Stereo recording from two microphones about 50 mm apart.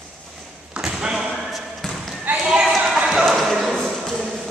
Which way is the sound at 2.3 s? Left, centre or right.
Right.